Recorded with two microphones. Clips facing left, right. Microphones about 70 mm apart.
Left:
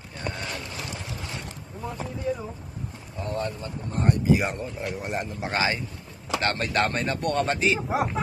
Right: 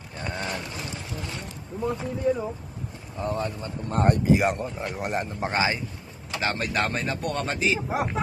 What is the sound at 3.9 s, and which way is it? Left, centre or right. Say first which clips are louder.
Speech: right 3 dB; right.